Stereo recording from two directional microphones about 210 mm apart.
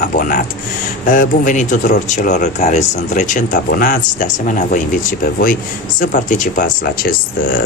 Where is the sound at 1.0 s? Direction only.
40° left (ahead or behind).